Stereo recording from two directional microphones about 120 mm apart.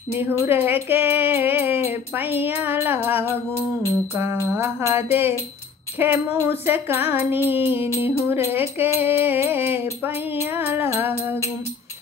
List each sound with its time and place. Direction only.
0.1 s music: 20° right (ahead or behind)